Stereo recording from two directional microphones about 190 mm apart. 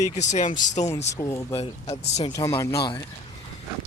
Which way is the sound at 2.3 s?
15° left (ahead or behind).